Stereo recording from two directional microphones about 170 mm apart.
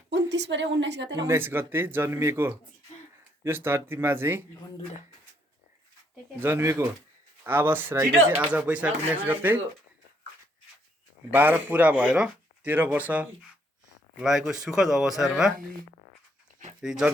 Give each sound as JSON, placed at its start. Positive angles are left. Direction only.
{"t": 0.1, "sound": "a woman's voice", "side_deg": -90}
{"t": 1.3, "sound": "speech", "side_deg": -15}
{"t": 6.4, "sound": "speech", "side_deg": -15}
{"t": 11.3, "sound": "speech", "side_deg": -10}
{"t": 16.8, "sound": "speech", "side_deg": -5}